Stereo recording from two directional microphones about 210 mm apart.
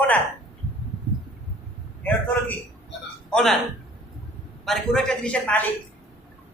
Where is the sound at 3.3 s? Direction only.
Centre (ahead or behind).